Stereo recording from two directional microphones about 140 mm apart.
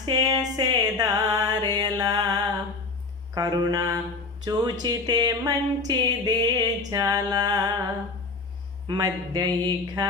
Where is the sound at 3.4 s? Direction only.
30° right (ahead or behind).